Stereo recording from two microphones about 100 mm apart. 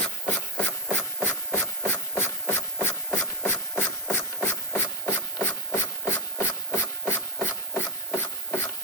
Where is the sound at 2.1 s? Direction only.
20° left (ahead or behind).